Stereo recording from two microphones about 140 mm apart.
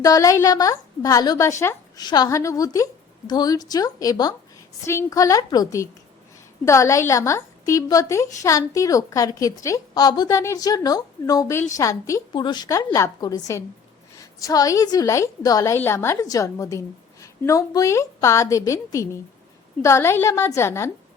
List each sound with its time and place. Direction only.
0.0 s a woman's voice: 25° left (ahead or behind)